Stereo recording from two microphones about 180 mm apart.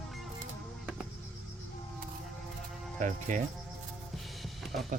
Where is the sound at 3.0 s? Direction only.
40° right (ahead or behind).